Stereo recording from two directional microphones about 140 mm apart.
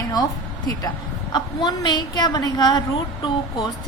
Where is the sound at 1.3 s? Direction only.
30° left (ahead or behind).